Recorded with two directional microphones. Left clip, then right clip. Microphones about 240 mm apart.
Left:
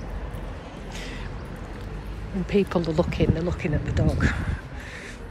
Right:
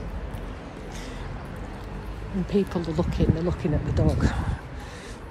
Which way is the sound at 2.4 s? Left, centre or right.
Centre.